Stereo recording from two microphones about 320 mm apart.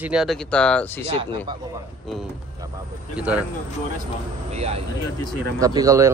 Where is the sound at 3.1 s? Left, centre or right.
Centre.